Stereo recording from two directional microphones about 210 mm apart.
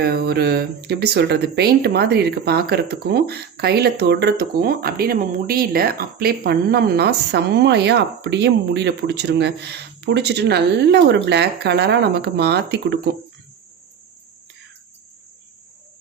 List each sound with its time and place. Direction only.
0.0 s speech: 45° right (ahead or behind)